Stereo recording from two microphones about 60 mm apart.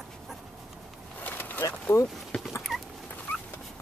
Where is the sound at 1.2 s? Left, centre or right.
Left.